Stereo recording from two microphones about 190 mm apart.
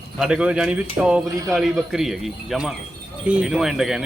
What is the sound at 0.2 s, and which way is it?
Speech, 5° right (ahead or behind).